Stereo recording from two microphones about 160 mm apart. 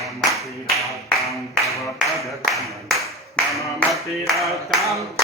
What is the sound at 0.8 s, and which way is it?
Tap, centre (ahead or behind).